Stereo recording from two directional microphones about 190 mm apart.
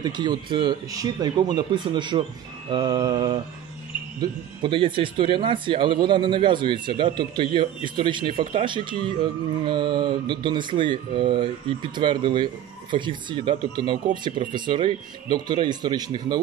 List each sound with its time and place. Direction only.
0.0 s speech: 25° right (ahead or behind)